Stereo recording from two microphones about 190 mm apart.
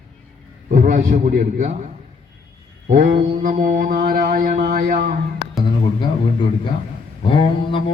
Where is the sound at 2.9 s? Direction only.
45° right (ahead or behind).